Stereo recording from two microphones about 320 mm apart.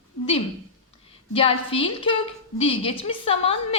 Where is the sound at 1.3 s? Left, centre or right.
Centre.